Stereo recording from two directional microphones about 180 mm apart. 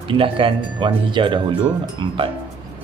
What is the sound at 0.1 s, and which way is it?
Speech, 30° right (ahead or behind).